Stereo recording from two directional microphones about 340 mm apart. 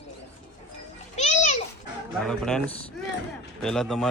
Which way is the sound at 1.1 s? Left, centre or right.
Centre.